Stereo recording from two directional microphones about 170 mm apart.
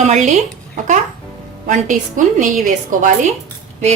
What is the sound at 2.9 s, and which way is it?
Speech, 50° right (ahead or behind).